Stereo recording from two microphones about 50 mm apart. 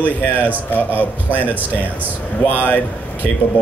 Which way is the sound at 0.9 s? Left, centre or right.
Right.